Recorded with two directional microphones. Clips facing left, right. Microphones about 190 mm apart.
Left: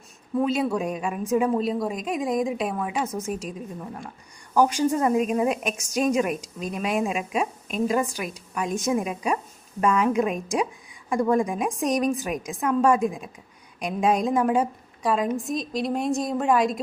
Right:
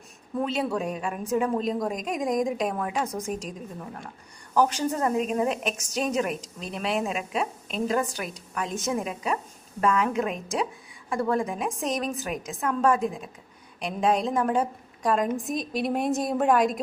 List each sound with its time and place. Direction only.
0.3 s a woman's voice: 10° left (ahead or behind)